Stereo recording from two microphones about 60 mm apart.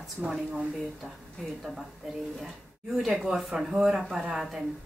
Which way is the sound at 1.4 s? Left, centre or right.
Centre.